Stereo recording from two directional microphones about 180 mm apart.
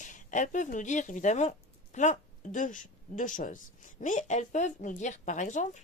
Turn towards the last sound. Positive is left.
turn(degrees=40)  # may be behind; listen again after turning